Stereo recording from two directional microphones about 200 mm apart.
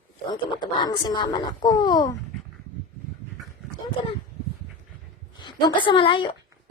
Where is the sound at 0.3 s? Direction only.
20° left (ahead or behind).